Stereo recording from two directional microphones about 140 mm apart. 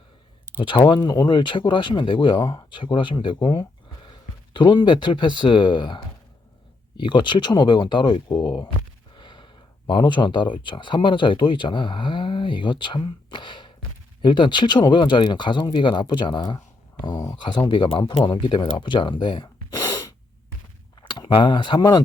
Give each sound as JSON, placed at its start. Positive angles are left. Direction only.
{"t": 0.9, "sound": "speech", "side_deg": 30}
{"t": 3.3, "sound": "speech", "side_deg": 25}
{"t": 18.3, "sound": "speech", "side_deg": 30}